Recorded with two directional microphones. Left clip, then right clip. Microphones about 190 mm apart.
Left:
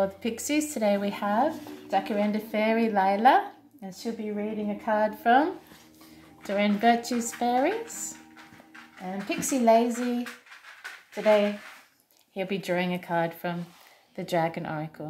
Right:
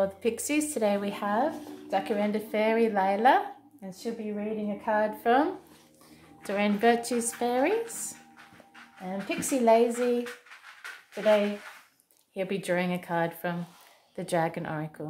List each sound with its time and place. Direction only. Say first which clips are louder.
0.0 s speech: right 1 dB; 15° right (ahead or behind)
12.4 s speech: even; 15° right (ahead or behind)